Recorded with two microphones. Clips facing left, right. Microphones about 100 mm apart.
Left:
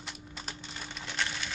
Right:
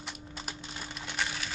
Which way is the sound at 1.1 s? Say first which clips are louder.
Even; 5° right (ahead or behind).